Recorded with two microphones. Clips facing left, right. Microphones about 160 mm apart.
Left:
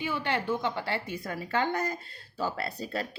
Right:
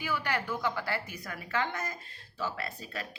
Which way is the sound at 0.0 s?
25° left (ahead or behind).